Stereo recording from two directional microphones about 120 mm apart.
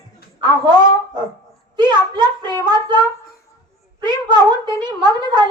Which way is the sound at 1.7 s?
40° right (ahead or behind).